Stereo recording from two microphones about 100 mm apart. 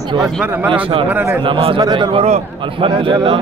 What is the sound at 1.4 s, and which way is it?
Speech, 65° right (ahead or behind).